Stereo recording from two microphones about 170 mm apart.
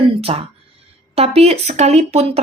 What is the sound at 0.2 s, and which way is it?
Speech, 35° right (ahead or behind).